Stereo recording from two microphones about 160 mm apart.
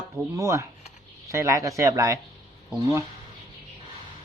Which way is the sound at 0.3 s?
20° right (ahead or behind).